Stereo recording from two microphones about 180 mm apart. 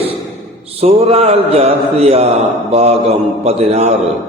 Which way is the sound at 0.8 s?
35° right (ahead or behind).